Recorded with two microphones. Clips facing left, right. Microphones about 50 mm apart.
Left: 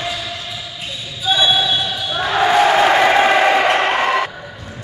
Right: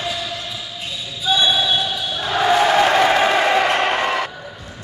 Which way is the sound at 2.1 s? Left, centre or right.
Left.